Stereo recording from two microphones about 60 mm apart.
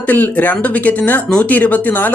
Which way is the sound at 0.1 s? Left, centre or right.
Left.